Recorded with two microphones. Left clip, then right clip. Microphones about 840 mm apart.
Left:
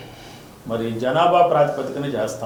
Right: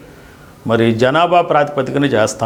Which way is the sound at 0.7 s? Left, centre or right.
Right.